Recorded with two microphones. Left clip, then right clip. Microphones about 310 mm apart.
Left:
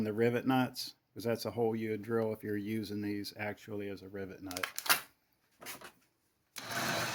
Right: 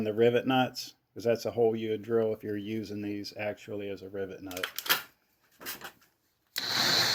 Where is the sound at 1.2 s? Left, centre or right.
Left.